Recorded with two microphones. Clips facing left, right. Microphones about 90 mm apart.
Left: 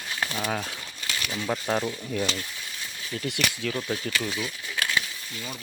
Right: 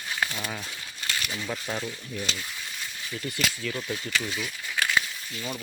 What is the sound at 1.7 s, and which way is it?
Speech, 50° left (ahead or behind).